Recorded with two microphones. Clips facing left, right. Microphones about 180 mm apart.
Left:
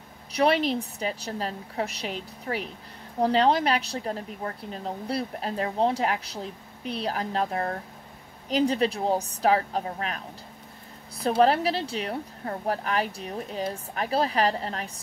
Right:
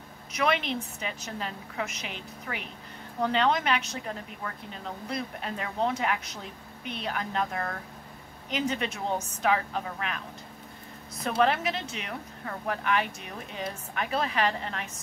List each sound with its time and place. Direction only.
0.3 s a woman's voice: 35° left (ahead or behind)